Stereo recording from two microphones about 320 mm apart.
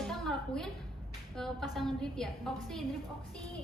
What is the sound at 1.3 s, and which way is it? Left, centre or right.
Speech, centre.